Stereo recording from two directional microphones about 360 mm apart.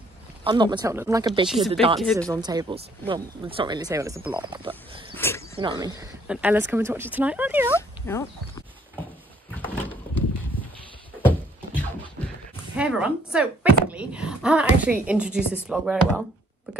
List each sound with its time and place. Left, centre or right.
0.4 s speech: centre
2.0 s speech: centre
5.1 s speech: centre
5.6 s speech: centre
7.7 s a sound: centre
11.2 s music: centre
12.7 s speech: centre